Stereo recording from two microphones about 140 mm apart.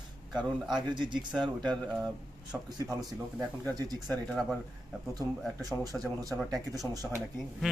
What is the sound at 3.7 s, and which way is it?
Speech, 30° right (ahead or behind).